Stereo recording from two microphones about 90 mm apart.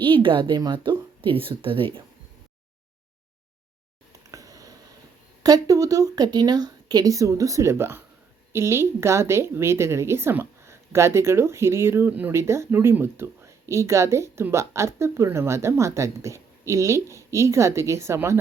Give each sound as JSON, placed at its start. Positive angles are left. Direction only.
{"t": 0.0, "sound": "speech", "side_deg": -70}
{"t": 4.3, "sound": "a sound", "side_deg": -40}
{"t": 5.4, "sound": "a woman's voice", "side_deg": -40}